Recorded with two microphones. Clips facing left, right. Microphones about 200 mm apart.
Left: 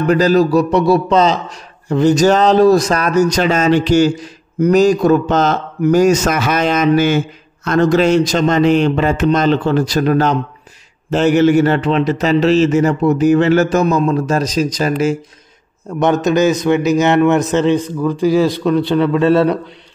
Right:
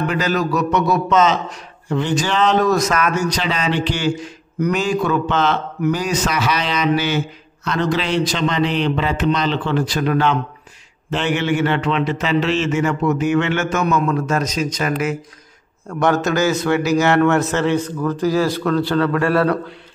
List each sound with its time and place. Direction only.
0.0 s a man's voice: 40° left (ahead or behind); by 19.6 s 20° left (ahead or behind)